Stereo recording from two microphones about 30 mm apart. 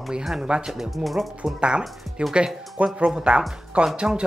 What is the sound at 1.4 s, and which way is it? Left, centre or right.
Speech, right.